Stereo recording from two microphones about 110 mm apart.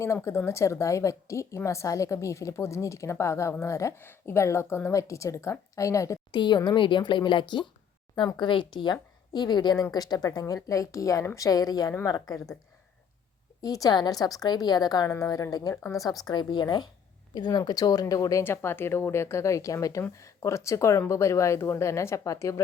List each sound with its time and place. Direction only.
0.0 s a woman's voice: 25° left (ahead or behind)
6.3 s a woman's voice: 45° left (ahead or behind)
13.6 s a woman's voice: 35° left (ahead or behind)